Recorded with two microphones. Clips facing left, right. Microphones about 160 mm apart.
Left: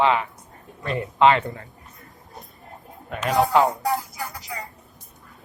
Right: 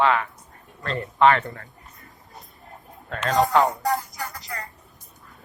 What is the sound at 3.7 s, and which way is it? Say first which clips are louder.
Music: even; 5° left (ahead or behind).